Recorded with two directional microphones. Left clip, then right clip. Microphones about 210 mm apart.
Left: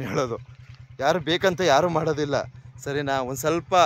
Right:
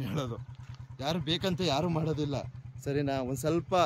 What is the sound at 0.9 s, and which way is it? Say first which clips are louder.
Speech: left 10 dB; 15° left (ahead or behind).